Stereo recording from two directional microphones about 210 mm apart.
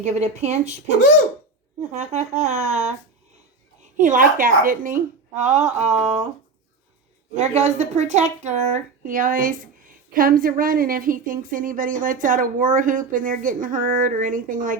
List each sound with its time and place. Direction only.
0.0 s speech: 35° right (ahead or behind)
4.0 s speech: 40° right (ahead or behind)
7.3 s speech: 35° right (ahead or behind)